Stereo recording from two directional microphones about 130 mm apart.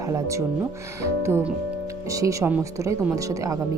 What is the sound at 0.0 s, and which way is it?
Speech, 25° right (ahead or behind).